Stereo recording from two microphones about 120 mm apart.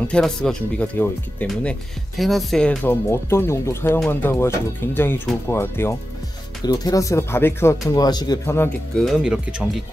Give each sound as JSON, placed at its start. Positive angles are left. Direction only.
{"t": 0.1, "sound": "speech", "side_deg": 5}
{"t": 2.1, "sound": "speech", "side_deg": 0}
{"t": 3.1, "sound": "speech", "side_deg": 20}
{"t": 6.6, "sound": "speech", "side_deg": 30}
{"t": 7.9, "sound": "speech", "side_deg": 35}
{"t": 9.0, "sound": "speech", "side_deg": -5}